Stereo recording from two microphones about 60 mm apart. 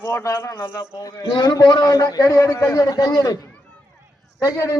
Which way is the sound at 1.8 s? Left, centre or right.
Left.